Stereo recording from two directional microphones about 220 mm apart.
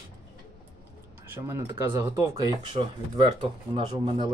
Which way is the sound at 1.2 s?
10° right (ahead or behind).